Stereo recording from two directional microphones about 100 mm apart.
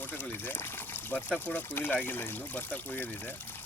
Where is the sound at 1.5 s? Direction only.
20° left (ahead or behind).